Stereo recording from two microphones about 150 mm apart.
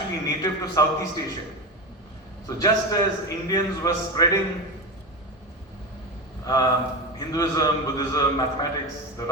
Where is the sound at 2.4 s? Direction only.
25° left (ahead or behind).